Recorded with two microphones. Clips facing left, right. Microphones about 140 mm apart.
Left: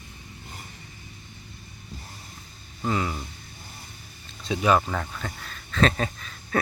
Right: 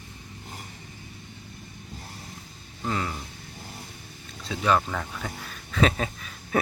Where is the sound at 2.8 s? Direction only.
5° left (ahead or behind).